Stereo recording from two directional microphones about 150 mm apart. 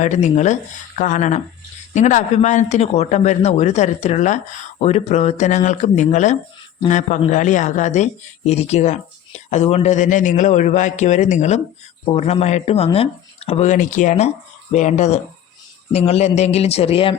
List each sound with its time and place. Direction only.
0.0 s speech: 50° left (ahead or behind)